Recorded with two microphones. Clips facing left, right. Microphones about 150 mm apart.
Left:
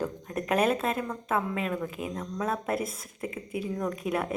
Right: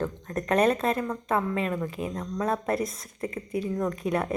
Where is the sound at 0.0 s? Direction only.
10° left (ahead or behind).